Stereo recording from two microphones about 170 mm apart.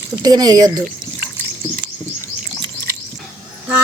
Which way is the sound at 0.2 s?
25° right (ahead or behind).